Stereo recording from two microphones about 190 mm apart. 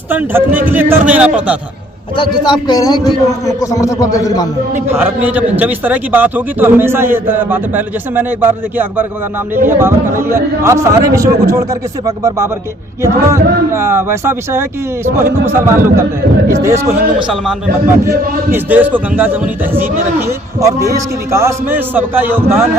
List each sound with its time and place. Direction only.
0.1 s a man's voice: 10° right (ahead or behind)
2.1 s a man's voice: 25° left (ahead or behind)
4.9 s a man's voice: 10° right (ahead or behind)
17.2 s a man's voice: 5° right (ahead or behind)
18.5 s a man's voice: 10° right (ahead or behind)